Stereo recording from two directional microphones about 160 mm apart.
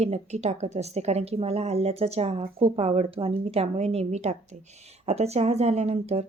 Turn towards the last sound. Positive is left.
turn(degrees=-40)  # may be behind; listen again after turning